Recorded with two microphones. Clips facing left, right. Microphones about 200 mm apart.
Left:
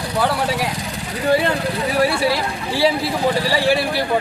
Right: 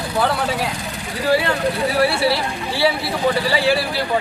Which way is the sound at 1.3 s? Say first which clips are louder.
Left 1 dB; 20° left (ahead or behind).